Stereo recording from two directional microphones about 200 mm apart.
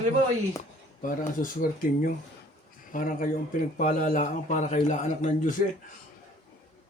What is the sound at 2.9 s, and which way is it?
A man's voice, 40° left (ahead or behind).